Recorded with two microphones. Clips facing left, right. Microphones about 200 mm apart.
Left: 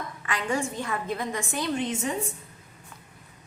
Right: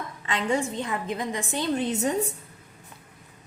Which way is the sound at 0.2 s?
25° right (ahead or behind).